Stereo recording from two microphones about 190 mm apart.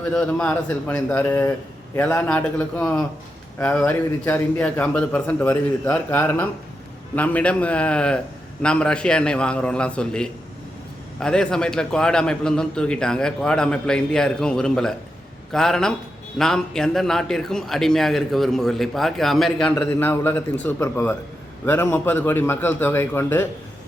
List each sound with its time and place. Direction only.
0.0 s a man's voice: 5° left (ahead or behind)